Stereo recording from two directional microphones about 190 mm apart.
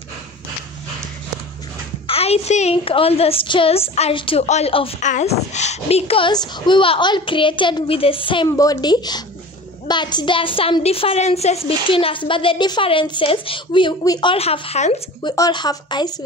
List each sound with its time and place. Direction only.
2.0 s a woman's voice: 30° left (ahead or behind)
15.2 s a woman's voice: 20° left (ahead or behind)